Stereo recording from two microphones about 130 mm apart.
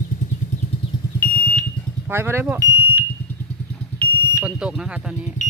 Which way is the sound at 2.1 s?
20° right (ahead or behind).